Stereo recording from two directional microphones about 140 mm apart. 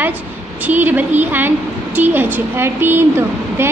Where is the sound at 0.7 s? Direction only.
10° right (ahead or behind).